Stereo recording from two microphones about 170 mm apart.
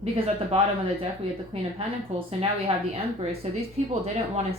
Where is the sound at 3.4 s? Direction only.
40° right (ahead or behind).